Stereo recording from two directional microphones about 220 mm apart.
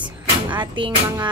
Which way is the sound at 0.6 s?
20° right (ahead or behind).